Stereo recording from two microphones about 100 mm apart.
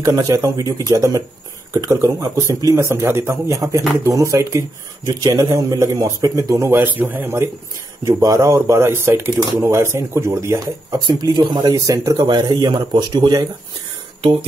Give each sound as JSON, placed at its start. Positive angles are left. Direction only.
{"t": 0.0, "sound": "speech", "side_deg": -35}
{"t": 8.0, "sound": "speech", "side_deg": -35}
{"t": 11.1, "sound": "speech", "side_deg": -45}
{"t": 11.7, "sound": "speech", "side_deg": -35}